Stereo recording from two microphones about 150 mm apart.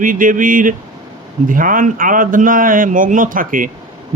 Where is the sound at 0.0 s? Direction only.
65° right (ahead or behind).